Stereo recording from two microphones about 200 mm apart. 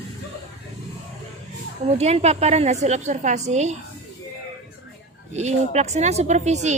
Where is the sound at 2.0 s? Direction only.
35° right (ahead or behind).